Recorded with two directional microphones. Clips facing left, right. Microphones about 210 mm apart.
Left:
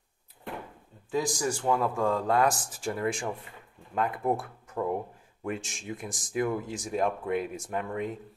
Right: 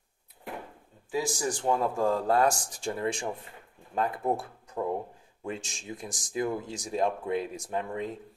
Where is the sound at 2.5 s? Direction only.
5° left (ahead or behind).